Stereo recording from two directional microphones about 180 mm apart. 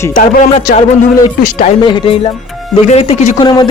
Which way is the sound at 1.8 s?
25° left (ahead or behind).